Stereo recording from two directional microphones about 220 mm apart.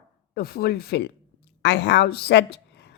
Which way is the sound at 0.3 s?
45° left (ahead or behind).